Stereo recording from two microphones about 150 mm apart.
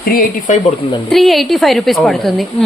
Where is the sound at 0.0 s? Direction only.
70° left (ahead or behind).